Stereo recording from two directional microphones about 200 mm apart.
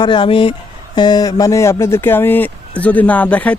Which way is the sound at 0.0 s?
25° left (ahead or behind).